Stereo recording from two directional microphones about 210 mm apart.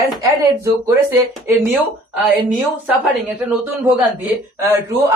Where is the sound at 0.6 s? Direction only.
15° right (ahead or behind).